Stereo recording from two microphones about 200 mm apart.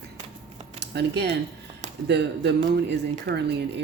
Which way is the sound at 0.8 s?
55° right (ahead or behind).